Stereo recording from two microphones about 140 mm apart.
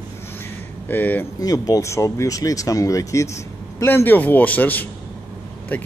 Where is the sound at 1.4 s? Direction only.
25° left (ahead or behind).